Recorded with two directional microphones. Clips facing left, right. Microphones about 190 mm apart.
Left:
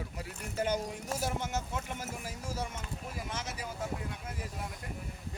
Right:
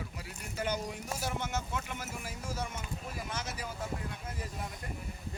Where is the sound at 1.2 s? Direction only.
40° left (ahead or behind).